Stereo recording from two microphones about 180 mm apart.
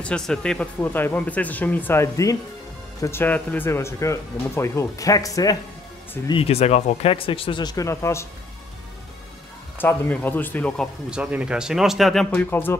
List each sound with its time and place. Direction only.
0.0 s speech: 5° left (ahead or behind)
6.2 s speech: 30° left (ahead or behind); by 8.3 s 15° left (ahead or behind)
9.8 s speech: 10° left (ahead or behind)
11.1 s speech: 5° right (ahead or behind)
12.4 s speech: 10° left (ahead or behind)